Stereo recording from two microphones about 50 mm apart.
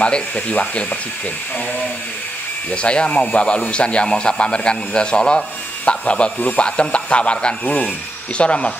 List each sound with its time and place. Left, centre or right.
0.0 s speech: left
2.7 s speech: left